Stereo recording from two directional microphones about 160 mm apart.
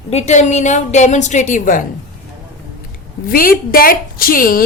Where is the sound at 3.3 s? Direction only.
65° left (ahead or behind).